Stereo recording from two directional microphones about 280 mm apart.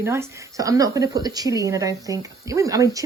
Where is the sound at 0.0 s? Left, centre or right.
Centre.